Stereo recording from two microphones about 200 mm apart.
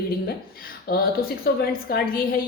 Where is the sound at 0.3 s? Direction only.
50° left (ahead or behind).